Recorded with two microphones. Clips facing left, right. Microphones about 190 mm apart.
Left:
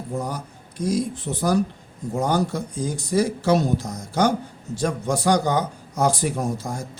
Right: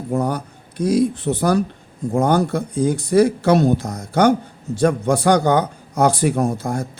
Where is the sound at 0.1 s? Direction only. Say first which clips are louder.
Right 8 dB; 65° right (ahead or behind).